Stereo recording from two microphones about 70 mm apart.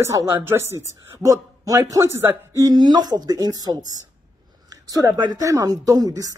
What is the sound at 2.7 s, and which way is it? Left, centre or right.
Speech, right.